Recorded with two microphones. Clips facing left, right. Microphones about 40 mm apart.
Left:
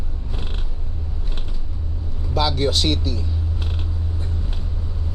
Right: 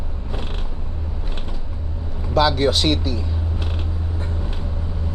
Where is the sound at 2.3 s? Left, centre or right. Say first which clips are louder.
Right 4 dB; centre.